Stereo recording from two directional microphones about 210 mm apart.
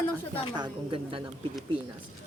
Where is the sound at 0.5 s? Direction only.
20° right (ahead or behind).